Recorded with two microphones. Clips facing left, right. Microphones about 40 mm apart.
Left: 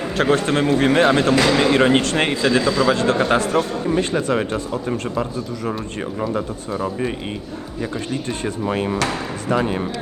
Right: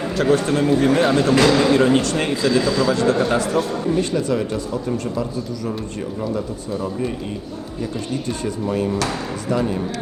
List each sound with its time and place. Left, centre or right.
0.2 s a man's voice: left
2.6 s a man's voice: left
2.8 s a man's voice: left
8.3 s a man's voice: left